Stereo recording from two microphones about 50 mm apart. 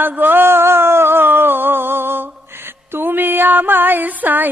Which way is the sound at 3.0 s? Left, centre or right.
Right.